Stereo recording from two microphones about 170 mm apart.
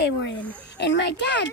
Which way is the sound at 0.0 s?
90° left.